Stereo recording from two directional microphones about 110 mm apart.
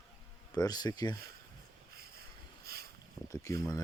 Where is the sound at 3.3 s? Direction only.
30° left (ahead or behind).